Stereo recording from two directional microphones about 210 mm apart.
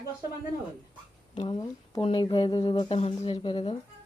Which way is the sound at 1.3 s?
25° left (ahead or behind).